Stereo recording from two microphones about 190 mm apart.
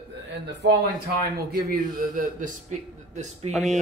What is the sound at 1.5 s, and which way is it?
A man's voice, 45° right (ahead or behind).